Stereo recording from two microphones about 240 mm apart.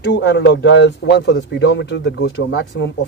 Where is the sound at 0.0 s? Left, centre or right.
Left.